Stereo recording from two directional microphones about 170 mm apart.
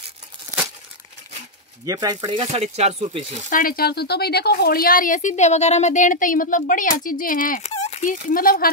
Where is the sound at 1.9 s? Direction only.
20° right (ahead or behind).